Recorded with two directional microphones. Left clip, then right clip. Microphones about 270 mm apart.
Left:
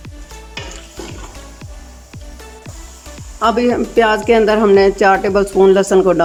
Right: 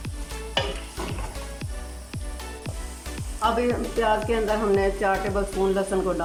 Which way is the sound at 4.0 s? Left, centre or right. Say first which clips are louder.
Left 12 dB; left.